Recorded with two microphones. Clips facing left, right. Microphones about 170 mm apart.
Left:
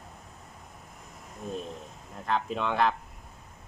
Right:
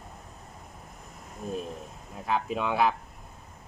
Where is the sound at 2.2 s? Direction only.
5° right (ahead or behind).